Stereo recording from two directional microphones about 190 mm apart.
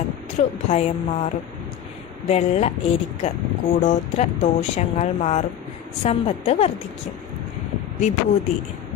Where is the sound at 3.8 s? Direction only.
40° left (ahead or behind).